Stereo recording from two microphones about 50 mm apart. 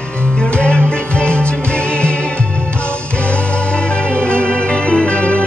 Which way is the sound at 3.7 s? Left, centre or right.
Left.